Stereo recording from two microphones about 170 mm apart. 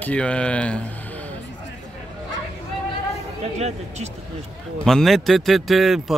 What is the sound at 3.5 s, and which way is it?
Speech, 40° right (ahead or behind).